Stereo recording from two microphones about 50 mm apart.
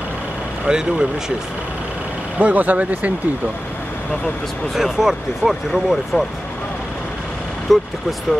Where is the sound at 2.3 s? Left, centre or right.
Right.